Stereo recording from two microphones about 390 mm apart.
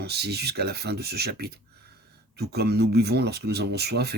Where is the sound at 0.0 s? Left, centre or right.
Right.